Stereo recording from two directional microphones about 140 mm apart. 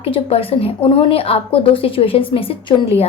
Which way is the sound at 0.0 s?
45° left (ahead or behind).